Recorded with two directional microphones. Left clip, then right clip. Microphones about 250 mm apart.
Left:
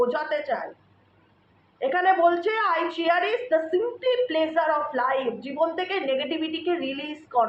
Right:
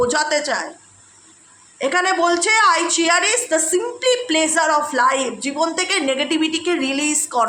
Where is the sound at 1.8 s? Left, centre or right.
Right.